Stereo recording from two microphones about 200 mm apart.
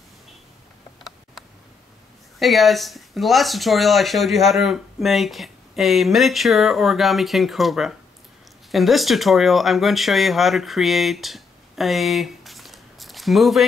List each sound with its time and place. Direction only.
2.3 s speech: centre (ahead or behind)